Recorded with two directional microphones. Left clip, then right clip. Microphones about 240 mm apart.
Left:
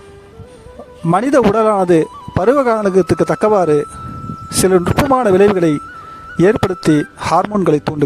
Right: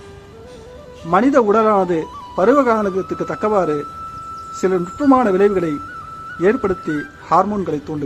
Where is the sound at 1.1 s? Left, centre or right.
Left.